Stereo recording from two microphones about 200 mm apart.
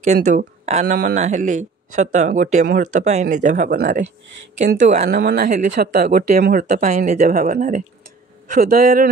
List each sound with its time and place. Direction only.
0.0 s speech: 35° right (ahead or behind)
5.0 s speech: 50° right (ahead or behind)